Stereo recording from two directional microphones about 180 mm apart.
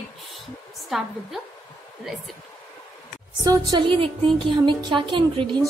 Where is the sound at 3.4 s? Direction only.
25° right (ahead or behind).